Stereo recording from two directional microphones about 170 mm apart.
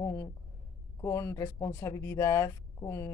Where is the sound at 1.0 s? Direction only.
15° left (ahead or behind).